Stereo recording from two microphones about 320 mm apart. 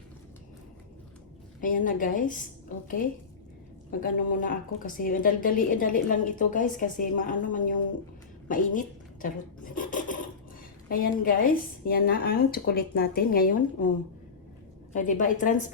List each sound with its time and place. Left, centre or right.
1.6 s a woman's voice: left
4.0 s a woman's voice: left
9.7 s filing: left
10.8 s a woman's voice: left
14.9 s a woman's voice: left